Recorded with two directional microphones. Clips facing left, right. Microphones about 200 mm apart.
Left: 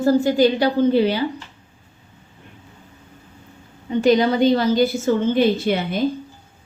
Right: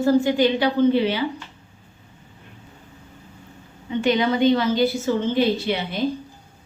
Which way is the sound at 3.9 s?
40° left (ahead or behind).